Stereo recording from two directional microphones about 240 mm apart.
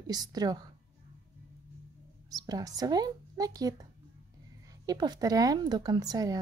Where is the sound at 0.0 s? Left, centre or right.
Centre.